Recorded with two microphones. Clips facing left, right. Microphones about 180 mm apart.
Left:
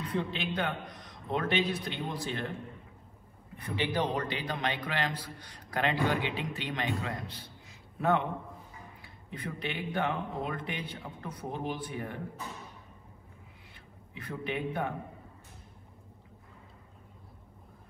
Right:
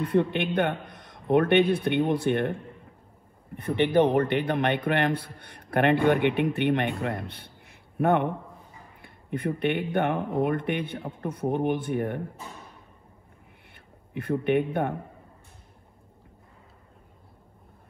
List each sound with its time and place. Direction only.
0.0 s a man's voice: 60° right (ahead or behind)
3.6 s a man's voice: 60° right (ahead or behind)
14.1 s a man's voice: 60° right (ahead or behind)